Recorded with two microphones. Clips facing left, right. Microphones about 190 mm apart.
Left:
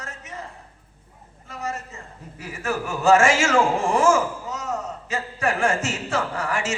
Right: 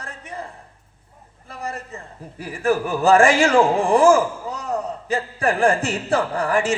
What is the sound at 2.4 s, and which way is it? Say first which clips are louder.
A man's voice: right 7 dB; 35° right (ahead or behind).